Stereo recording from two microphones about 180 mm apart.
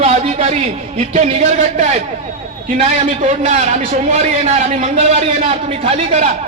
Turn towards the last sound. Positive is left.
turn(degrees=-35)  # may be behind; listen again after turning